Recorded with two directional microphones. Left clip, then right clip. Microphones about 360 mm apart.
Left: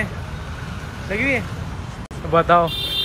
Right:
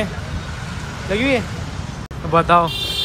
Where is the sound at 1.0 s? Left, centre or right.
Centre.